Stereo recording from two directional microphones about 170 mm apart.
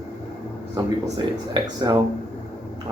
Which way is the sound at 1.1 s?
25° right (ahead or behind).